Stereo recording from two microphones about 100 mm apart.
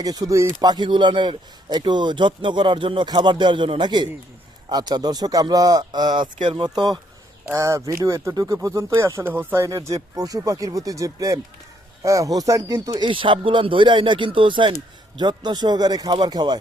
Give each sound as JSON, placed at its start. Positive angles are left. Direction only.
{"t": 0.0, "sound": "speech", "side_deg": -40}
{"t": 0.6, "sound": "a man's voice", "side_deg": -45}
{"t": 6.4, "sound": "a man's voice", "side_deg": -55}
{"t": 7.4, "sound": "speech", "side_deg": -30}
{"t": 9.6, "sound": "speech", "side_deg": -35}
{"t": 13.0, "sound": "speech", "side_deg": -55}
{"t": 15.2, "sound": "a man's voice", "side_deg": -45}